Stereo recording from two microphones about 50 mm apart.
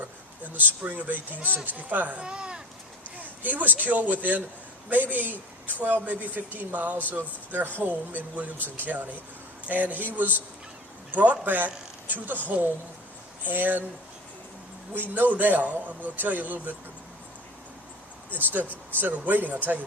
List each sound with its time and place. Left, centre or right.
0.4 s a man's voice: right
2.2 s speech: centre
3.2 s a sound: right
3.8 s a man's voice: right
15.1 s a man's voice: right
18.3 s a man's voice: right